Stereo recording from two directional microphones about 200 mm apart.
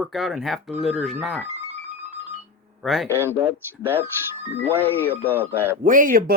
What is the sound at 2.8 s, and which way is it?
Speech, centre (ahead or behind).